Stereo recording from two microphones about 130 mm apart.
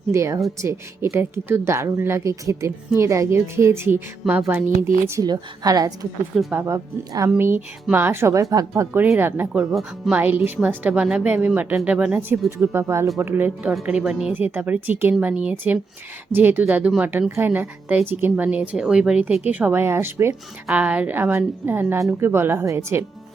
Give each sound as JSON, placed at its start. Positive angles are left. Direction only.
{"t": 0.1, "sound": "a woman's voice", "side_deg": -25}
{"t": 9.6, "sound": "speech", "side_deg": 0}
{"t": 10.2, "sound": "a woman's voice", "side_deg": -15}